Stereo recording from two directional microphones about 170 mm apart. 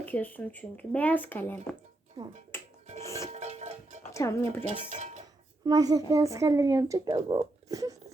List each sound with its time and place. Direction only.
0.0 s speech: 10° left (ahead or behind)
2.2 s speech: 25° right (ahead or behind)
2.5 s filing: 15° left (ahead or behind)
3.0 s a sound: 15° left (ahead or behind)
3.2 s music: 40° right (ahead or behind)
4.1 s speech: 15° left (ahead or behind)
4.6 s speech: 40° right (ahead or behind)
5.6 s speech: 20° right (ahead or behind)
7.7 s wail: 20° right (ahead or behind)